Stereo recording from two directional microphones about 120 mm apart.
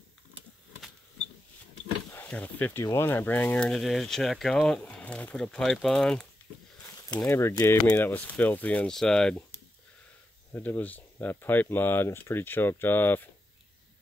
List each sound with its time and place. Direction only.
2.1 s speech: 10° left (ahead or behind)
7.2 s speech: 20° left (ahead or behind)
10.5 s speech: 15° left (ahead or behind)